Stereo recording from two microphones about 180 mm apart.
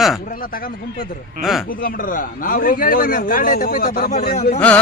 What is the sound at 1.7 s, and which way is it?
A man's voice, 50° left (ahead or behind).